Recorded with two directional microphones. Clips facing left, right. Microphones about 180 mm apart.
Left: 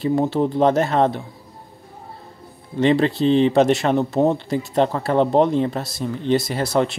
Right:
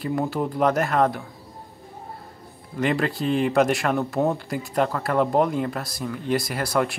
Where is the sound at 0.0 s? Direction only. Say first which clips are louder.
Left 6 dB; 25° left (ahead or behind).